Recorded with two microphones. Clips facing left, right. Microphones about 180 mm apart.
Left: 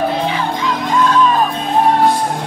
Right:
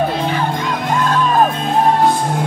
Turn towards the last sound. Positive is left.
turn(degrees=-50)  # may be behind; listen again after turning